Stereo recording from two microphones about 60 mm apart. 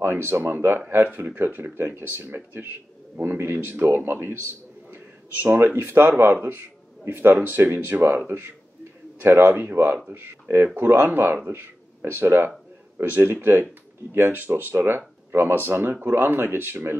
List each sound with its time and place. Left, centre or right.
0.0 s speech: right
4.9 s a man's voice: right